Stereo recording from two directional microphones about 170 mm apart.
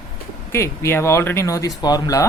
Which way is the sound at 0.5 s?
15° left (ahead or behind).